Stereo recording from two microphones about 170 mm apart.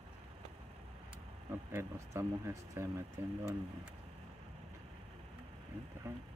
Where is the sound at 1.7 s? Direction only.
15° right (ahead or behind).